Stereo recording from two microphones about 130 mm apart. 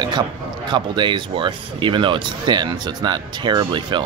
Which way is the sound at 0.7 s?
35° right (ahead or behind).